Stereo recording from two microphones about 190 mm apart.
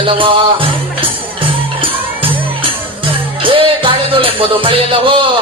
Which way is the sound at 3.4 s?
30° right (ahead or behind).